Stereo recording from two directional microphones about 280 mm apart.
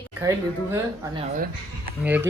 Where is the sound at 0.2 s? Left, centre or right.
Centre.